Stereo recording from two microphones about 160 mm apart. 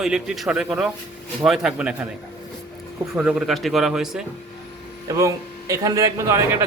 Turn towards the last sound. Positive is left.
turn(degrees=-20)  # may be behind; listen again after turning